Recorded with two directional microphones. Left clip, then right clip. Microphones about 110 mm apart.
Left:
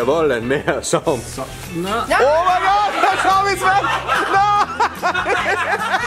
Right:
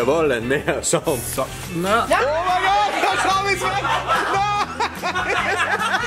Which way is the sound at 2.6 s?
75° left (ahead or behind).